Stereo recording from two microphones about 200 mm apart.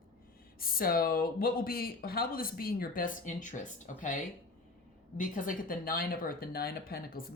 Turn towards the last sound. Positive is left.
turn(degrees=50)  # may be behind; listen again after turning